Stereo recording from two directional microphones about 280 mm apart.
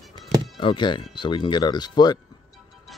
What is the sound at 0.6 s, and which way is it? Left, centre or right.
Speech, centre.